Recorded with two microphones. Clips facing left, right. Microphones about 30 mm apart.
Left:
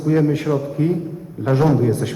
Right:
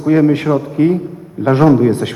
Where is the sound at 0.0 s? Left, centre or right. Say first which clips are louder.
Right 6 dB; right.